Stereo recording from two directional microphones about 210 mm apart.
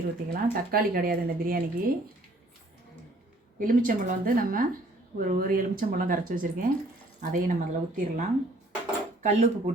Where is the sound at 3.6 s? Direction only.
40° right (ahead or behind).